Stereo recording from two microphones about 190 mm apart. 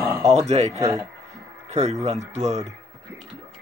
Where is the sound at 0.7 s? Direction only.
20° right (ahead or behind).